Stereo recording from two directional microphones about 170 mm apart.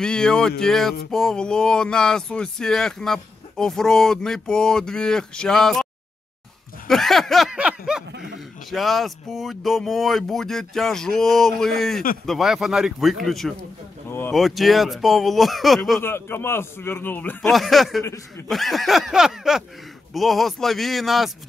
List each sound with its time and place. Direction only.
0.0 s speech: 5° left (ahead or behind)
6.9 s speech: centre (ahead or behind)
8.1 s speech: 90° right
8.6 s speech: centre (ahead or behind)
14.0 s a sound: 15° left (ahead or behind)
14.3 s speech: centre (ahead or behind)
16.0 s a man's voice: 15° left (ahead or behind)